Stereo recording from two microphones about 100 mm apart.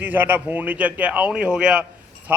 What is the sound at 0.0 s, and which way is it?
A man's voice, 20° right (ahead or behind).